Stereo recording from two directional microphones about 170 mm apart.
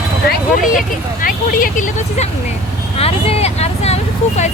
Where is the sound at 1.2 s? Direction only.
55° left (ahead or behind).